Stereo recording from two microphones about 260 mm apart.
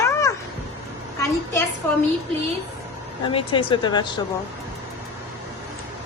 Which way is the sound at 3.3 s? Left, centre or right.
Centre.